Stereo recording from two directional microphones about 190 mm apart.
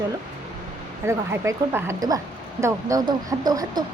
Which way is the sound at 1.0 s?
15° right (ahead or behind).